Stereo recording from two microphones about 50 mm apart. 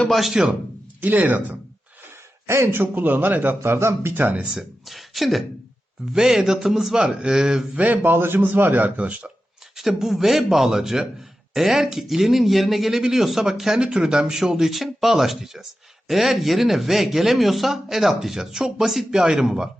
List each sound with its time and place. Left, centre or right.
0.1 s a man's voice: centre
1.0 s a man's voice: right
2.7 s a man's voice: right
3.6 s speech: right
4.1 s a man's voice: right
4.4 s speech: centre
7.8 s a man's voice: right
8.1 s a man's voice: right
9.0 s speech: right
9.7 s a man's voice: centre